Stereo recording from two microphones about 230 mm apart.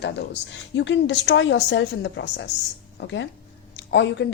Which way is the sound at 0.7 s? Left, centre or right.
Left.